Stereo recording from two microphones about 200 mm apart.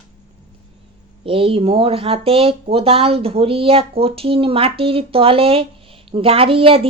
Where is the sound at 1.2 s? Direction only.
25° right (ahead or behind).